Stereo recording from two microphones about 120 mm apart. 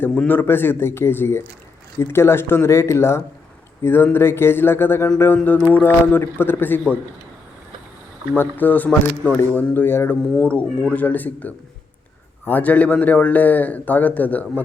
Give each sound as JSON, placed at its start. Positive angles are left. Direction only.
{"t": 0.0, "sound": "a man's voice", "side_deg": 10}
{"t": 8.4, "sound": "a man's voice", "side_deg": 15}